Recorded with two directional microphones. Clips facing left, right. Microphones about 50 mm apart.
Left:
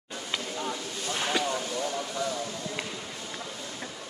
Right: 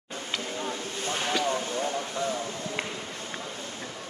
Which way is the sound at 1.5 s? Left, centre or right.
Right.